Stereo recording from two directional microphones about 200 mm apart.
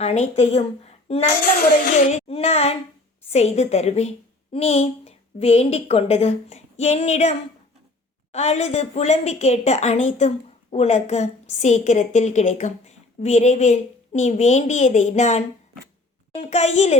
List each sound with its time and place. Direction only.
0.0 s a woman's voice: 35° left (ahead or behind)
1.4 s a woman's voice: 45° left (ahead or behind)